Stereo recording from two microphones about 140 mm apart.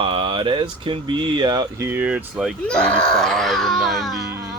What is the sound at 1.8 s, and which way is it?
Speech, 15° right (ahead or behind).